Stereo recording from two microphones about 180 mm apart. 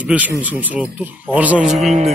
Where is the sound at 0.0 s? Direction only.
10° right (ahead or behind).